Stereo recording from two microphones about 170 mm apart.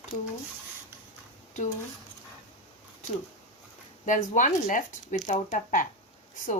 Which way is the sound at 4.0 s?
50° left (ahead or behind).